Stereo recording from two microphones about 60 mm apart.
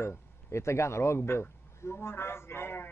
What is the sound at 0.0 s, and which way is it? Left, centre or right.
A man's voice, left.